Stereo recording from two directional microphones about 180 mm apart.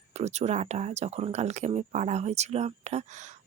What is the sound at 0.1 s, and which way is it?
Speech, 40° right (ahead or behind).